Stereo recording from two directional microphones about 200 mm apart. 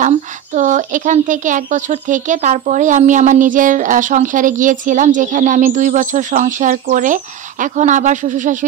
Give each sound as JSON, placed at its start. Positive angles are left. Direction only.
{"t": 0.6, "sound": "speech", "side_deg": -40}